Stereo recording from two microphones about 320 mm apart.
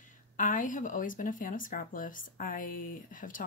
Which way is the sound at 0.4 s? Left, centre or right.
Left.